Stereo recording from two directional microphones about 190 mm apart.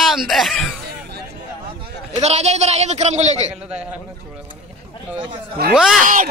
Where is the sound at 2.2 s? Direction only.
35° right (ahead or behind).